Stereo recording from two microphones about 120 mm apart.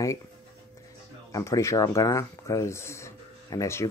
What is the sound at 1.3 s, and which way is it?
Speech, 25° left (ahead or behind).